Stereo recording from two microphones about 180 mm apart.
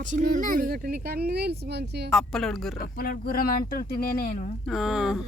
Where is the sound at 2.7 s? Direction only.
55° left (ahead or behind).